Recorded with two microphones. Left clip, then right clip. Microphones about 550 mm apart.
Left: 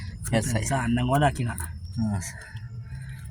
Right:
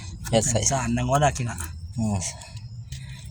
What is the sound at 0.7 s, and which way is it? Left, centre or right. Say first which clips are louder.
Speech: left 3 dB; left.